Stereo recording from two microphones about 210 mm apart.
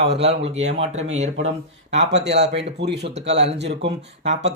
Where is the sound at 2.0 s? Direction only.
55° right (ahead or behind).